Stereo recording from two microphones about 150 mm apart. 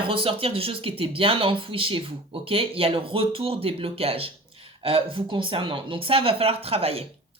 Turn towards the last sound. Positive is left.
turn(degrees=-40)  # may be behind; listen again after turning